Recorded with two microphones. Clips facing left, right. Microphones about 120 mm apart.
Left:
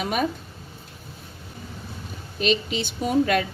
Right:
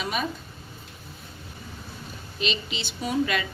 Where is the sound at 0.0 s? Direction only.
50° left (ahead or behind).